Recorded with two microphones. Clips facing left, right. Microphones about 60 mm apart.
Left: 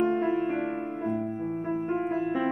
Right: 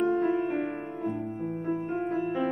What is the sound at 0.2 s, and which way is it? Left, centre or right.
Music, centre.